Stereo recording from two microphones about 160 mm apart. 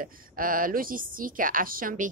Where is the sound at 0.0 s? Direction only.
60° right (ahead or behind).